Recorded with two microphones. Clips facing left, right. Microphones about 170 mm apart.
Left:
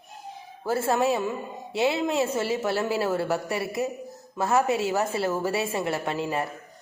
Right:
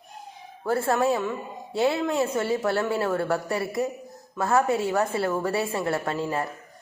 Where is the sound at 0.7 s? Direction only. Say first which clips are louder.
Right 1 dB; 25° left (ahead or behind).